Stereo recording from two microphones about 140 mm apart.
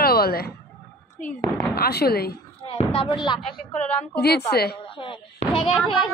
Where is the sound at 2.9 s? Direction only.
35° left (ahead or behind).